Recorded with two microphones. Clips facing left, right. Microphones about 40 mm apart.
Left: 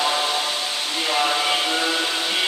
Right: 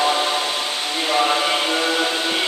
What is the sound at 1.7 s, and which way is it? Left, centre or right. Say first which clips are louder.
Music: right 2 dB; centre.